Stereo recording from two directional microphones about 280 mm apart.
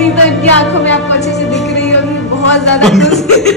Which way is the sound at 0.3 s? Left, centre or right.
Left.